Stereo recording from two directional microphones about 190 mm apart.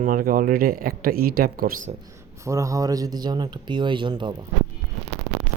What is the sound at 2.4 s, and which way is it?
A man's voice, 15° right (ahead or behind).